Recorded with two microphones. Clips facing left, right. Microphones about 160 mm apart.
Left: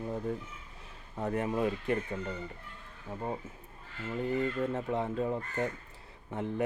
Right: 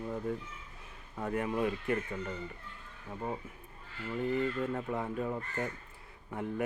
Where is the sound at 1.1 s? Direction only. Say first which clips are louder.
Left 2 dB; 25° left (ahead or behind).